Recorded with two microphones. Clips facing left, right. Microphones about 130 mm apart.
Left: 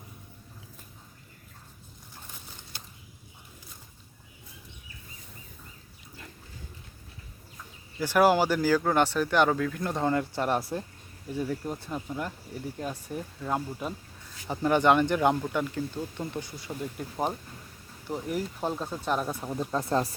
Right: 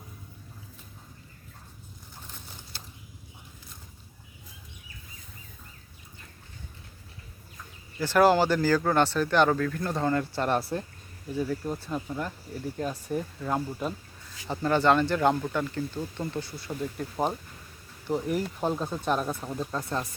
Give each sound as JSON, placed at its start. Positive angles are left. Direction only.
{"t": 7.9, "sound": "speech", "side_deg": 10}
{"t": 19.7, "sound": "speech", "side_deg": 30}